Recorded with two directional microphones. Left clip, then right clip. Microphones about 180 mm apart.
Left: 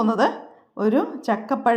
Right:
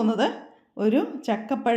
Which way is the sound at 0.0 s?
Centre (ahead or behind).